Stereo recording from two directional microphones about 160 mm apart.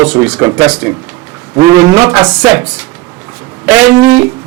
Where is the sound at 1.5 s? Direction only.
25° right (ahead or behind).